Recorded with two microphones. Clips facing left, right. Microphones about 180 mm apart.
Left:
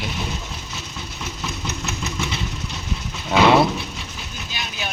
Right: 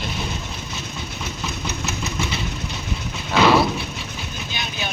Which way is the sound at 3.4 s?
25° left (ahead or behind).